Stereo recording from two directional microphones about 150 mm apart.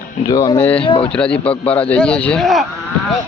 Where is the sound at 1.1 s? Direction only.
5° left (ahead or behind).